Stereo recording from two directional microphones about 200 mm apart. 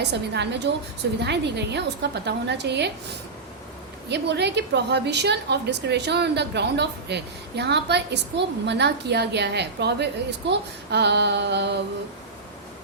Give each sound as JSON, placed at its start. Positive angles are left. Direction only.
{"t": 0.0, "sound": "a woman's voice", "side_deg": -55}
{"t": 4.1, "sound": "a woman's voice", "side_deg": -55}